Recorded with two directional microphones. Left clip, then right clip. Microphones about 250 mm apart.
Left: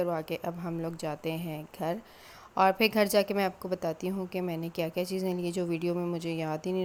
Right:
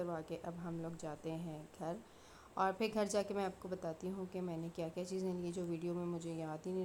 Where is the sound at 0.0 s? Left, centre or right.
Left.